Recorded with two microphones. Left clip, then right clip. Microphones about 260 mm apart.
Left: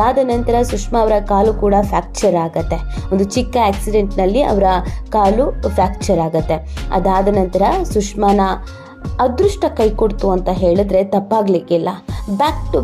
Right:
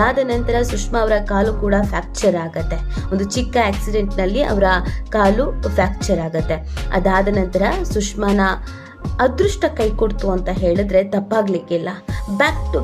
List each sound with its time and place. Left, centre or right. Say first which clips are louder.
0.0 s speech: left 3 dB; centre
7.5 s speech: left 4 dB; centre
10.4 s speech: left 3 dB; centre